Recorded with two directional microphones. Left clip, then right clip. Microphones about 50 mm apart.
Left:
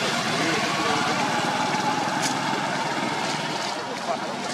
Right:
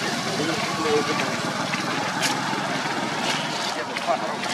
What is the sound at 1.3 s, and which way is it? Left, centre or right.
Vehicle, centre.